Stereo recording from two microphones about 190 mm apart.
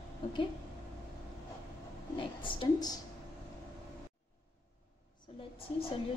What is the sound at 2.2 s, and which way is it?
Speech, 25° left (ahead or behind).